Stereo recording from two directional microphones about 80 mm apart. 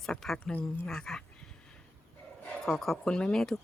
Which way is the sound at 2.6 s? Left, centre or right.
Centre.